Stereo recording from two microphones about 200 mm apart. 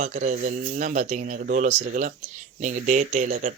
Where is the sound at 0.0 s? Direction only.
40° right (ahead or behind).